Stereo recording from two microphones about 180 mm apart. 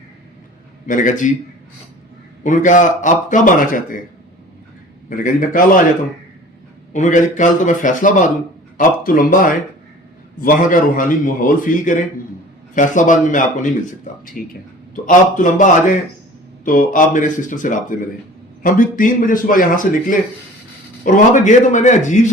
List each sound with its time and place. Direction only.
0.9 s a man's voice: 45° left (ahead or behind)
2.4 s a man's voice: 45° left (ahead or behind)
5.0 s a man's voice: 45° left (ahead or behind)
6.9 s a man's voice: 45° left (ahead or behind)